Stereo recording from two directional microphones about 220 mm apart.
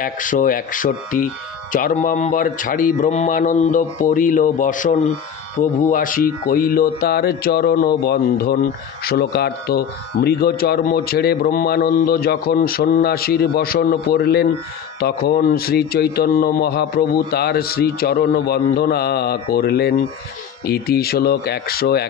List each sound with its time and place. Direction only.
0.0 s speech: 35° left (ahead or behind)